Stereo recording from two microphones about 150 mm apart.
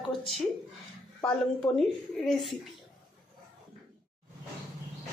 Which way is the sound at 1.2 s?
5° left (ahead or behind).